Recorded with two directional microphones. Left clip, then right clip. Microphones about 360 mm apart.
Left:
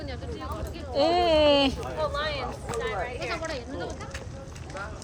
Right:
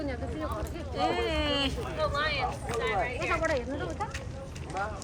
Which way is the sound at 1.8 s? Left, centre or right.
Left.